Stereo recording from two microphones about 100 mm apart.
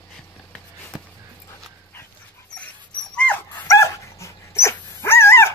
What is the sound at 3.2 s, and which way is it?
Dog, 15° left (ahead or behind).